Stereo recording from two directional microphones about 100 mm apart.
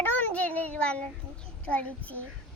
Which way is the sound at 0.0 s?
15° left (ahead or behind).